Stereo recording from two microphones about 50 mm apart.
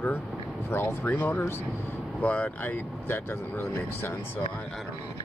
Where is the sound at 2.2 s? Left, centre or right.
Left.